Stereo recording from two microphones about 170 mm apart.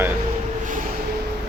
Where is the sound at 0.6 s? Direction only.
50° right (ahead or behind).